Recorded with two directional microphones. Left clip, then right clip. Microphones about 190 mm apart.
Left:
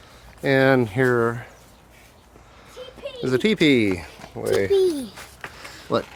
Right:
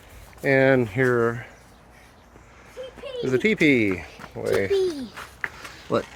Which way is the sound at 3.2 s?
35° left (ahead or behind).